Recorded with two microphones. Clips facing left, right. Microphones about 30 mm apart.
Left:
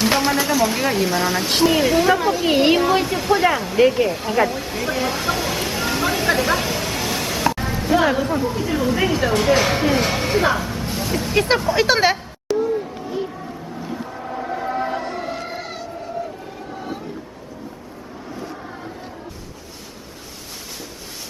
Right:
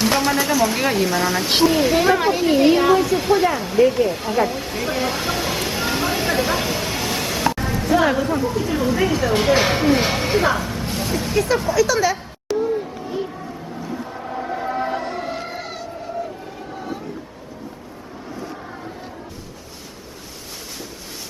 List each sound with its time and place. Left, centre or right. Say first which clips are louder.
0.0 s speech: even; centre
2.1 s a woman's voice: right 1 dB; centre
2.5 s speech: right 1 dB; left
3.2 s speech: right 1 dB; centre
3.8 s speech: left 2 dB; centre
4.1 s speech: even; centre
4.4 s a sound: even; centre
6.2 s music: left 1 dB; centre
9.3 s speech: right 1 dB; centre
11.3 s speech: even; left
12.5 s a sound: left 1 dB; centre